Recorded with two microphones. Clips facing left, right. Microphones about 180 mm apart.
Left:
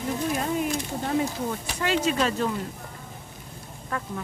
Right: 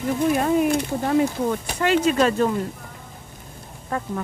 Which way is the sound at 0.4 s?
65° right (ahead or behind).